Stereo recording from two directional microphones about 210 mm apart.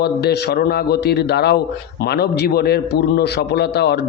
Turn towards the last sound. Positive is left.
turn(degrees=50)  # may be behind; listen again after turning